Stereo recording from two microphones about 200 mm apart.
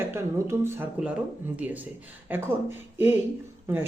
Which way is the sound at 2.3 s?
10° right (ahead or behind).